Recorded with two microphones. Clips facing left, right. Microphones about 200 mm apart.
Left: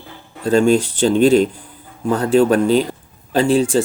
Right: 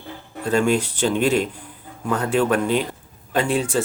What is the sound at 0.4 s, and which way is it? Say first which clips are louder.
Speech: left 6 dB; 30° left (ahead or behind).